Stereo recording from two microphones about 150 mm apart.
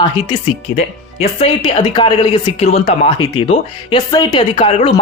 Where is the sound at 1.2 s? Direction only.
40° left (ahead or behind).